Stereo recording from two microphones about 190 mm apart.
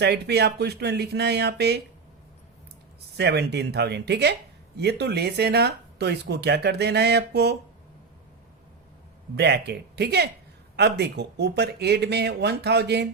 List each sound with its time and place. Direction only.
0.0 s speech: 60° right (ahead or behind)
3.2 s speech: 60° right (ahead or behind)
9.3 s speech: 60° right (ahead or behind)